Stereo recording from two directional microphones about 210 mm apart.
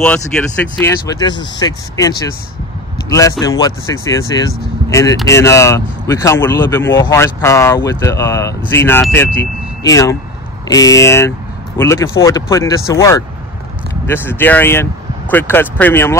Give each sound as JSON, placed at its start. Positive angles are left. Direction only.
{"t": 0.3, "sound": "speech", "side_deg": 5}